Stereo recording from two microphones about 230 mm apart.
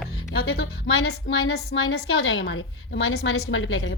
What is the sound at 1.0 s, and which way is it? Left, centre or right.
A woman's voice, left.